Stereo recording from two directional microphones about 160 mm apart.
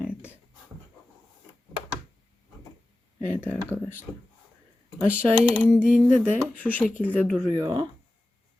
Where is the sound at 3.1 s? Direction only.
10° left (ahead or behind).